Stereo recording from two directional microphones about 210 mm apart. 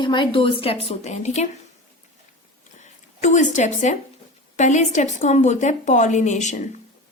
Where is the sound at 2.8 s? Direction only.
35° left (ahead or behind).